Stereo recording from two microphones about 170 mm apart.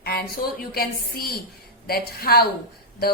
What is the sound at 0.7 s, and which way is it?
A woman's voice, 65° left (ahead or behind).